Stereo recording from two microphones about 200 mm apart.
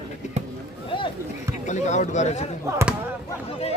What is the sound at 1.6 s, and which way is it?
Speech, 35° left (ahead or behind).